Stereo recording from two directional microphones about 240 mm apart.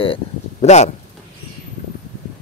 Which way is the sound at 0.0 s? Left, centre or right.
Left.